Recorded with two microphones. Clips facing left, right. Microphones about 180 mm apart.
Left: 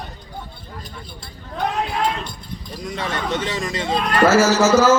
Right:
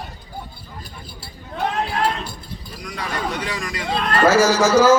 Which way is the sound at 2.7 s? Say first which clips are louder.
Left 3 dB; 25° left (ahead or behind).